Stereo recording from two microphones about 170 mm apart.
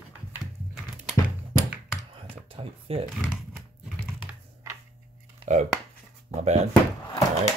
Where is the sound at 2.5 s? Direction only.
35° right (ahead or behind).